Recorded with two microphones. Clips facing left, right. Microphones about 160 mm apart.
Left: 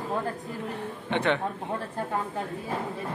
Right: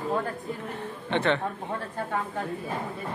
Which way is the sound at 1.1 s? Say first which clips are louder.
Right 1 dB; 15° left (ahead or behind).